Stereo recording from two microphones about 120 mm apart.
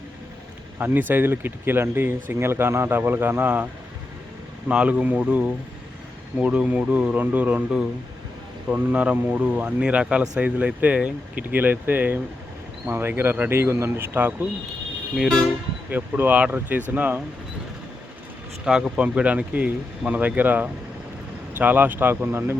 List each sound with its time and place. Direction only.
0.8 s a man's voice: 15° right (ahead or behind)
4.7 s a man's voice: 10° right (ahead or behind)
15.1 s vehicle: centre (ahead or behind)
15.9 s a man's voice: 15° right (ahead or behind)
18.6 s a man's voice: 5° right (ahead or behind)